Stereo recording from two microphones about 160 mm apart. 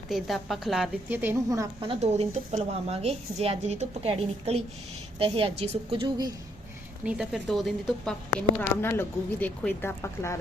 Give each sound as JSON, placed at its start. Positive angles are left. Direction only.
{"t": 0.1, "sound": "a woman's voice", "side_deg": 0}
{"t": 1.1, "sound": "a woman's voice", "side_deg": -15}
{"t": 1.8, "sound": "a woman's voice", "side_deg": -40}
{"t": 7.0, "sound": "a woman's voice", "side_deg": -5}
{"t": 8.7, "sound": "speech", "side_deg": 15}